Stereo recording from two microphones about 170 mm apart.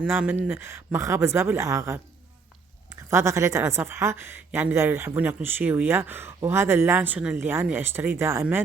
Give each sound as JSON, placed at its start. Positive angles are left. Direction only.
{"t": 0.0, "sound": "a woman's voice", "side_deg": -10}